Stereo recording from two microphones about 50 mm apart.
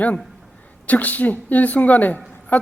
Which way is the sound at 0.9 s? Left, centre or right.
Left.